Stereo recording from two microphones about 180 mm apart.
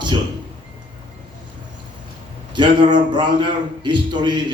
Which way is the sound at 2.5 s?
25° right (ahead or behind).